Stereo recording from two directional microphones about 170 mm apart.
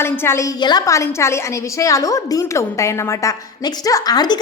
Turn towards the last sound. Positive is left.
turn(degrees=25)  # may be behind; listen again after turning